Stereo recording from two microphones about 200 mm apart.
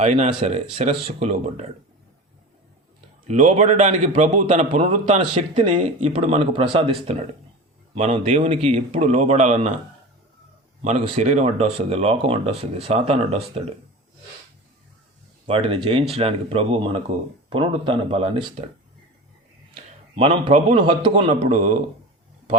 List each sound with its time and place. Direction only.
0.0 s speech: 35° right (ahead or behind)
3.2 s speech: 35° right (ahead or behind)
5.2 s speech: 25° right (ahead or behind)
10.8 s speech: 30° right (ahead or behind)
15.4 s speech: 30° right (ahead or behind)
19.7 s a man's voice: 25° right (ahead or behind)